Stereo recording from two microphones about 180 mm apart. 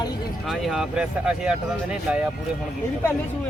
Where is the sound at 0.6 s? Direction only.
Centre (ahead or behind).